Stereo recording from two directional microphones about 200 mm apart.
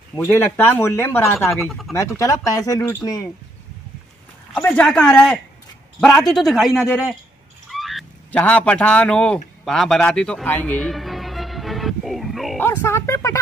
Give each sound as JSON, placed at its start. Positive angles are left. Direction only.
{"t": 0.3, "sound": "speech", "side_deg": 10}
{"t": 1.5, "sound": "a man's voice", "side_deg": 0}
{"t": 2.0, "sound": "speech", "side_deg": 15}
{"t": 4.6, "sound": "a man's voice", "side_deg": 5}
{"t": 7.7, "sound": "fowl", "side_deg": 0}
{"t": 12.6, "sound": "speech", "side_deg": 15}